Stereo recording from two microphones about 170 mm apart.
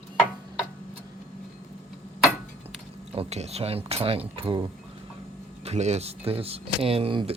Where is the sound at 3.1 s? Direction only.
35° right (ahead or behind).